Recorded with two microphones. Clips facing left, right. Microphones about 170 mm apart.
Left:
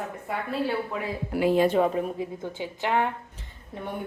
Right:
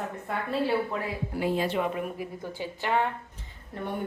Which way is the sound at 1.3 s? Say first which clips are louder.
Left 7 dB; 85° left.